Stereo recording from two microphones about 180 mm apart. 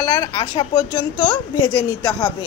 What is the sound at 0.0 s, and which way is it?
A woman's voice, 20° left (ahead or behind).